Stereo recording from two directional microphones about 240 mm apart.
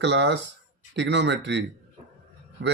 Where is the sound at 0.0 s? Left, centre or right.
Right.